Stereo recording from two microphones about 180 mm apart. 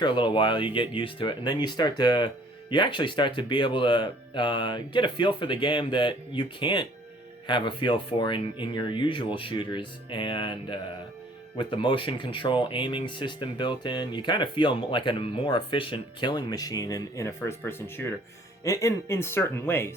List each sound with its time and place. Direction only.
0.0 s speech: 25° left (ahead or behind)